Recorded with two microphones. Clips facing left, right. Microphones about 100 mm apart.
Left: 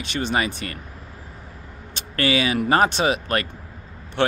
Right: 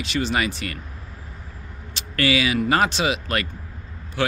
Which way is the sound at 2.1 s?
30° left (ahead or behind).